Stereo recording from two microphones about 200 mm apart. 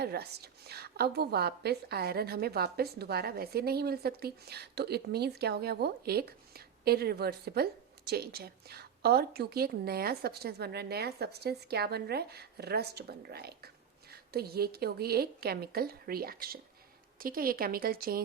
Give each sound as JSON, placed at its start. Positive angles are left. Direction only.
{"t": 0.0, "sound": "a woman's voice", "side_deg": -55}